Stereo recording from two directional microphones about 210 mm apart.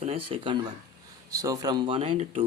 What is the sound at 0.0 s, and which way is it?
Speech, 25° right (ahead or behind).